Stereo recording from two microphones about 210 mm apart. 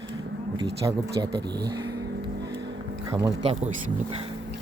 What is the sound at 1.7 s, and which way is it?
Vehicle, 20° right (ahead or behind).